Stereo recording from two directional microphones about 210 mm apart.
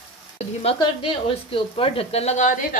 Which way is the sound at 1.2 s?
25° left (ahead or behind).